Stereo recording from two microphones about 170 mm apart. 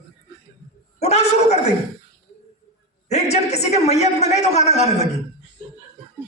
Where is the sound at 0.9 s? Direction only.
40° left (ahead or behind).